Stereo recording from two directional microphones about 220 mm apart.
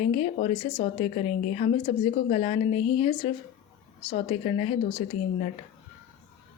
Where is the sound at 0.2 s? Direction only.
30° left (ahead or behind).